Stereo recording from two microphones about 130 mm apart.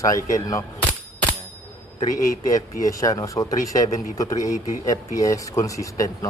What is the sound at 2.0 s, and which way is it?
Speech, 25° left (ahead or behind).